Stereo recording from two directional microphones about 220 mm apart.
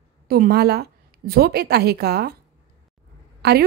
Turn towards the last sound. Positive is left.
turn(degrees=-45)  # may be behind; listen again after turning